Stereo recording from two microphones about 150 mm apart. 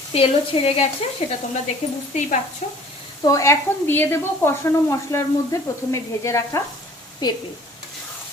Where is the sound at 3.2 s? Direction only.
20° left (ahead or behind).